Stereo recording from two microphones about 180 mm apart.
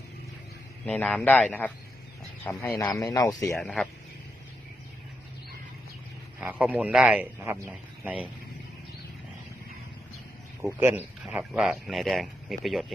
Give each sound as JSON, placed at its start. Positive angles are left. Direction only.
{"t": 0.9, "sound": "speech", "side_deg": 5}
{"t": 3.6, "sound": "speech", "side_deg": 5}
{"t": 6.4, "sound": "speech", "side_deg": -10}
{"t": 10.7, "sound": "speech", "side_deg": -15}